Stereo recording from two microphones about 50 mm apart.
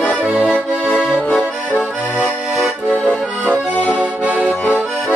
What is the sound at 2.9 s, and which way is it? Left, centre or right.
Accordion, left.